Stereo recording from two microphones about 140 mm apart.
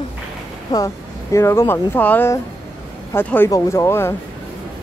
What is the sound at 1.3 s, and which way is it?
Speech, 20° left (ahead or behind).